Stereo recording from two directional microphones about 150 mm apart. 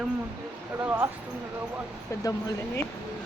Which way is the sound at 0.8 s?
10° right (ahead or behind).